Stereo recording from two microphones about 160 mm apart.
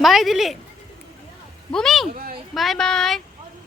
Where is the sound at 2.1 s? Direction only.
65° right (ahead or behind).